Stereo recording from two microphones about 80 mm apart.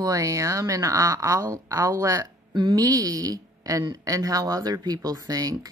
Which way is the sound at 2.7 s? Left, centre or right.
Right.